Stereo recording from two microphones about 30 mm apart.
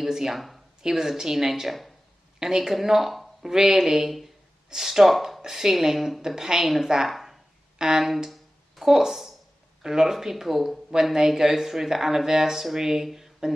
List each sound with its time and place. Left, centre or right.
0.1 s speech: centre
3.4 s speech: centre
5.4 s speech: centre
6.2 s speech: centre
7.1 s a sound: centre
7.8 s speech: right
8.3 s a sound: centre
9.8 s speech: centre